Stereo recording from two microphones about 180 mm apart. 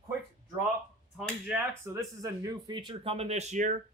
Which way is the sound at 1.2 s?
5° right (ahead or behind).